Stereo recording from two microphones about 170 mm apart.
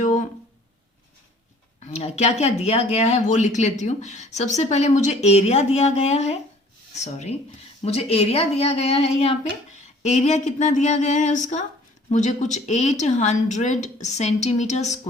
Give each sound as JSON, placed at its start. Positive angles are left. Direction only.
{"t": 0.0, "sound": "music", "side_deg": 45}
{"t": 1.8, "sound": "a woman's voice", "side_deg": 40}